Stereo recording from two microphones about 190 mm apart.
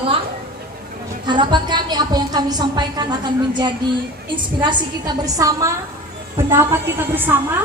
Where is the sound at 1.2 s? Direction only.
25° right (ahead or behind).